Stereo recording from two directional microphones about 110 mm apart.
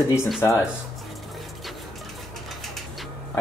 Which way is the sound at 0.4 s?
30° left (ahead or behind).